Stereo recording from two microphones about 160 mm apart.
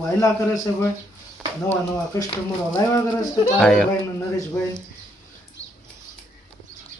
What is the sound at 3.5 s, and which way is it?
Speech, 5° left (ahead or behind).